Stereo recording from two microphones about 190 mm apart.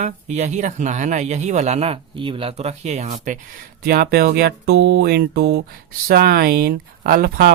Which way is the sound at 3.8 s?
55° right (ahead or behind).